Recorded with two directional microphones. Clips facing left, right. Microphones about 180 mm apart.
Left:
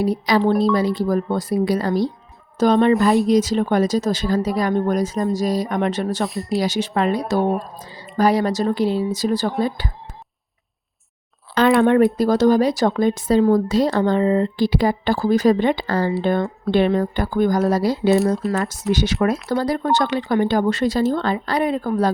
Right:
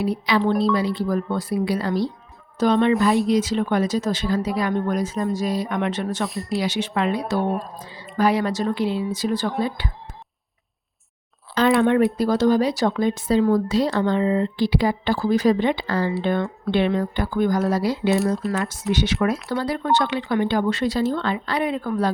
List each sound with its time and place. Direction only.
0.0 s speech: 40° left (ahead or behind)
2.9 s speech: centre (ahead or behind)
3.2 s speech: 40° left (ahead or behind)
6.2 s speech: centre (ahead or behind)
6.6 s speech: 40° left (ahead or behind)
7.4 s speech: centre (ahead or behind)
8.1 s speech: 40° left (ahead or behind)
11.8 s speech: 45° left (ahead or behind)